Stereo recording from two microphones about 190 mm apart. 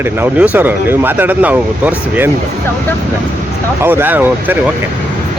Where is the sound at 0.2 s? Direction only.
10° right (ahead or behind).